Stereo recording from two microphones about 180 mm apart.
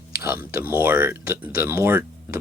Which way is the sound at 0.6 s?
10° right (ahead or behind).